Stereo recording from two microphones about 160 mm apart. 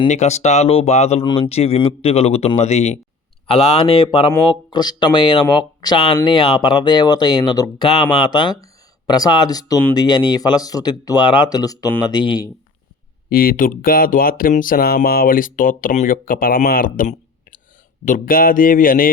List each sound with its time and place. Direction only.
0.1 s speech: 45° left (ahead or behind); by 12.5 s 25° left (ahead or behind)
13.3 s speech: 65° left (ahead or behind)